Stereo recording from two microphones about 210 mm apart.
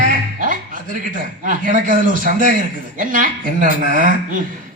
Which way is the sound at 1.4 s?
40° right (ahead or behind).